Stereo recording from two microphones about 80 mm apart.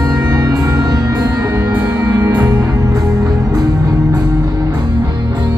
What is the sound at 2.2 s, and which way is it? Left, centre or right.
Music, right.